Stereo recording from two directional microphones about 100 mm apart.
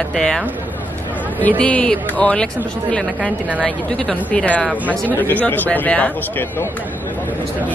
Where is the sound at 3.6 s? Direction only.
10° left (ahead or behind).